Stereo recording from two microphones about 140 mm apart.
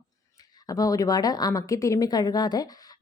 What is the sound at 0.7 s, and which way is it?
A woman's voice, 25° left (ahead or behind).